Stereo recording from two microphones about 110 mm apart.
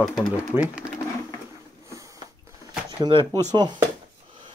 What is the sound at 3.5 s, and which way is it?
Speech, 40° right (ahead or behind).